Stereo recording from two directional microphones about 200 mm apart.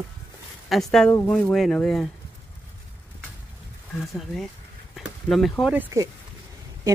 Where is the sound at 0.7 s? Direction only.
Centre (ahead or behind).